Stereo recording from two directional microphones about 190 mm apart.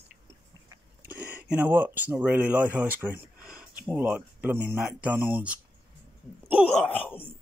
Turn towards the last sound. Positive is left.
turn(degrees=10)  # may be behind; listen again after turning